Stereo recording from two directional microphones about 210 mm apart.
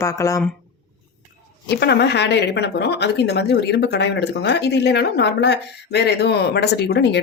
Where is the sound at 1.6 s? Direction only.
50° left (ahead or behind).